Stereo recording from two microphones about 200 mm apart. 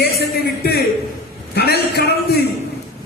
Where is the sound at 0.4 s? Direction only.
50° left (ahead or behind).